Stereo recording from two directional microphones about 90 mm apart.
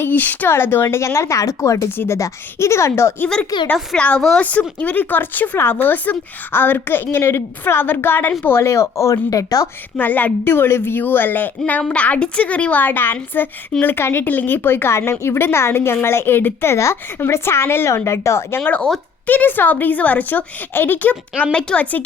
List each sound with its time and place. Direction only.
0.0 s speech: 20° left (ahead or behind)
3.5 s a woman's voice: 50° left (ahead or behind)
3.9 s a woman's voice: 15° left (ahead or behind); by 9.6 s 40° left (ahead or behind)
10.0 s a woman's voice: 20° left (ahead or behind)
18.6 s speech: 10° left (ahead or behind)